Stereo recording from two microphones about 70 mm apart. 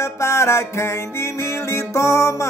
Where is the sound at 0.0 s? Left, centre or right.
Left.